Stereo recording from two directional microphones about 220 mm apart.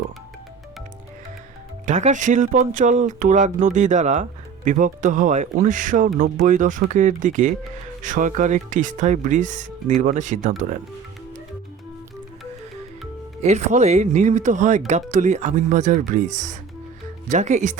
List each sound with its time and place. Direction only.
1.9 s speech: 35° right (ahead or behind)
13.4 s speech: 30° right (ahead or behind)